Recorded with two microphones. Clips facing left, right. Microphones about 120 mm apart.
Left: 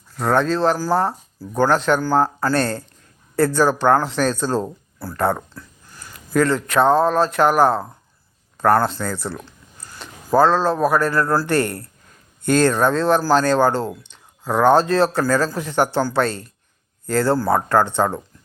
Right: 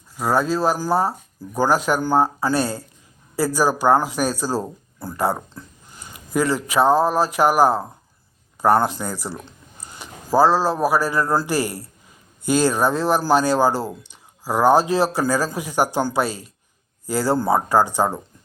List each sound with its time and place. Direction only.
0.2 s speech: 5° right (ahead or behind)
5.5 s speech: 20° right (ahead or behind)
9.8 s a sound: 20° right (ahead or behind)
10.3 s speech: 10° right (ahead or behind)